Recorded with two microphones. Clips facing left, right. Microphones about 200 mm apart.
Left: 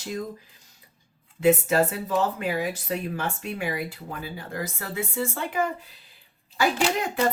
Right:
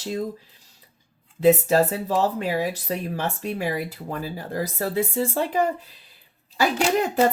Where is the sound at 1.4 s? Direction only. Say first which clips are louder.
Right 3 dB; 35° right (ahead or behind).